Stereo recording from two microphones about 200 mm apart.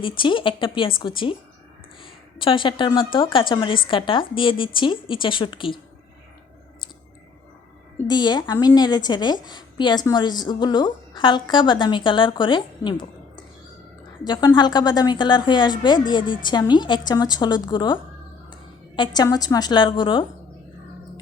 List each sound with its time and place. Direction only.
0.0 s a woman's voice: 25° left (ahead or behind)
7.9 s a woman's voice: 20° left (ahead or behind)